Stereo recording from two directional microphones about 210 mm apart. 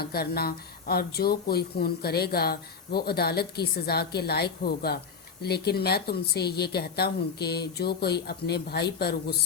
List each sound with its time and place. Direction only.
0.0 s speech: 45° left (ahead or behind)